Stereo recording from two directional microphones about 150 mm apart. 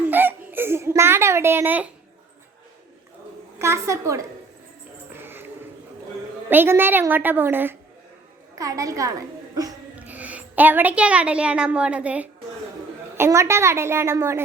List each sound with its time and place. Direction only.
0.0 s a sound: 10° right (ahead or behind)
3.6 s a woman's voice: 20° right (ahead or behind)
5.2 s music: 15° right (ahead or behind)
6.5 s a woman's voice: 15° right (ahead or behind)
10.0 s a woman's voice: 10° right (ahead or behind)